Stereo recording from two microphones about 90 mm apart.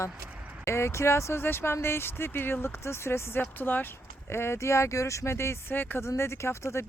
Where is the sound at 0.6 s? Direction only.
30° left (ahead or behind).